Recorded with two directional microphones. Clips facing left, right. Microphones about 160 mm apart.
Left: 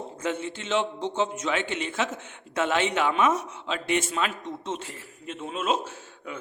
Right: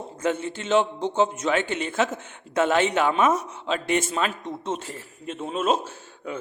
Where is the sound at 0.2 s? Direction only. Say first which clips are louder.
Right 5 dB; 45° right (ahead or behind).